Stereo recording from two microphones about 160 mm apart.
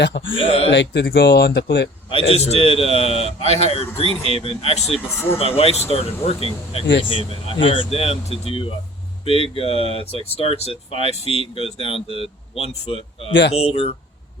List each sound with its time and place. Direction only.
0.3 s speech: 35° left (ahead or behind)
0.7 s speech: 90° left
2.0 s speech: 35° left (ahead or behind)